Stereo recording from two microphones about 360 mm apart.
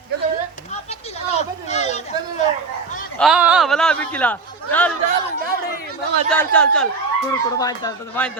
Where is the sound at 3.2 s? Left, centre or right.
Centre.